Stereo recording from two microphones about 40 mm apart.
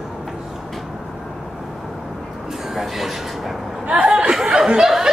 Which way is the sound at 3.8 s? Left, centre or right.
Right.